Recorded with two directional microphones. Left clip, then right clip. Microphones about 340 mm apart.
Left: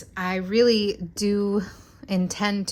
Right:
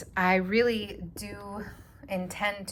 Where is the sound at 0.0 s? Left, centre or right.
Centre.